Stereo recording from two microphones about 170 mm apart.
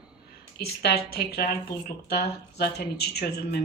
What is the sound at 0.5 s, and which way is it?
Speech, 75° left (ahead or behind).